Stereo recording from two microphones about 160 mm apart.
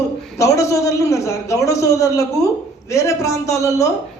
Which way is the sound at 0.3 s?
20° left (ahead or behind).